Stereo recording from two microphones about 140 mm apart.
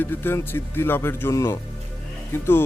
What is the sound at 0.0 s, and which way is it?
Speech, 15° left (ahead or behind).